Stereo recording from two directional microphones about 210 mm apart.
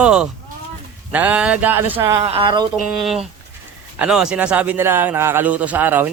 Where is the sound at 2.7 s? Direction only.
Centre (ahead or behind).